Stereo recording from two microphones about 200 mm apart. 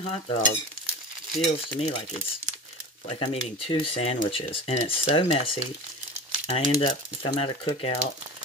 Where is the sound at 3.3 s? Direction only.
30° left (ahead or behind).